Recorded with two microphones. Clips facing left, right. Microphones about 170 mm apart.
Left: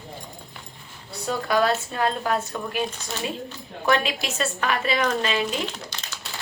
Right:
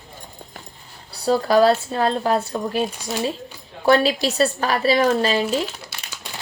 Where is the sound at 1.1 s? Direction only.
35° right (ahead or behind).